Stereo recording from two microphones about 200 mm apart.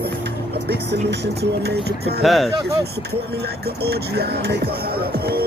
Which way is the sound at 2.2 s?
Centre (ahead or behind).